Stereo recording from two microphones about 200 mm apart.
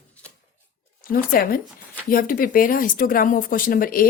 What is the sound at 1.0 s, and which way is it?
Speech, 45° left (ahead or behind).